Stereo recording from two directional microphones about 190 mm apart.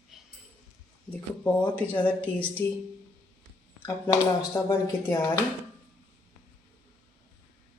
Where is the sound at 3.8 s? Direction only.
20° left (ahead or behind).